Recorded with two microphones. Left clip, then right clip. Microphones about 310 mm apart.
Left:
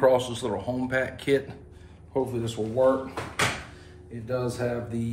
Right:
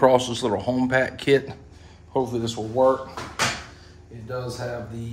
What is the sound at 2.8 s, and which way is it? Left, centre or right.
Speech, right.